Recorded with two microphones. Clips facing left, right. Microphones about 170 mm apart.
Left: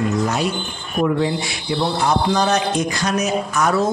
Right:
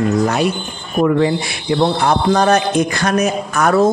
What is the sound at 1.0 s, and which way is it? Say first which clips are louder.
Speech: right 5 dB; 65° right (ahead or behind).